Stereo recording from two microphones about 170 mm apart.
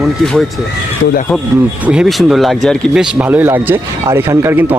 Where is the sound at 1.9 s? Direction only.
5° right (ahead or behind).